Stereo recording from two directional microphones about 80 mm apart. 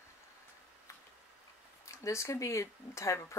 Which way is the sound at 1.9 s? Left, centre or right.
Left.